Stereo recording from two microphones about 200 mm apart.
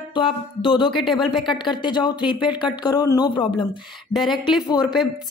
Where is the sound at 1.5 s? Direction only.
25° left (ahead or behind).